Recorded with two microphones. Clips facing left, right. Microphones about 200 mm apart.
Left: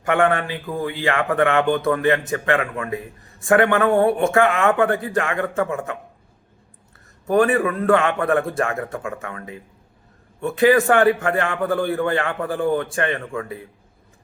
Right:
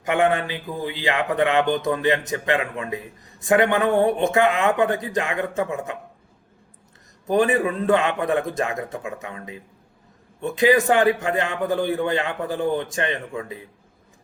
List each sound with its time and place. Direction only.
0.0 s a man's voice: 15° right (ahead or behind)
7.3 s a man's voice: 20° right (ahead or behind)